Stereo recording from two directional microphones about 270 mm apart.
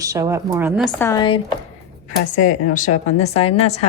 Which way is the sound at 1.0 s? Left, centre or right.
Centre.